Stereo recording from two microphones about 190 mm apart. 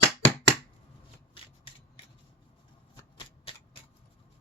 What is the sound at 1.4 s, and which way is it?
Rub, 30° left (ahead or behind).